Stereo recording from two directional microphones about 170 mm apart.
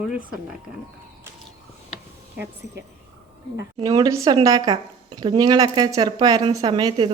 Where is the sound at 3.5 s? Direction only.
25° right (ahead or behind).